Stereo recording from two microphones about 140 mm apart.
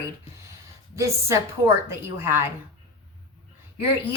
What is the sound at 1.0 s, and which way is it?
A woman's voice, 20° right (ahead or behind).